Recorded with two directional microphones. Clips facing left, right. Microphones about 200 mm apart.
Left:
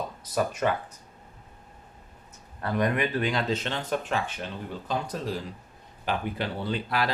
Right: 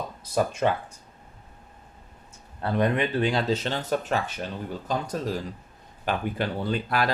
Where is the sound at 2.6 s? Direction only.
30° right (ahead or behind).